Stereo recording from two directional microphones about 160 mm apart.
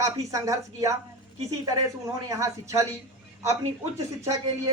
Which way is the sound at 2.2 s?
20° right (ahead or behind).